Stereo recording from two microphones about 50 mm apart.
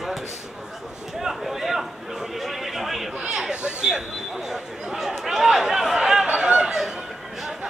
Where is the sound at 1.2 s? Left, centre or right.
Centre.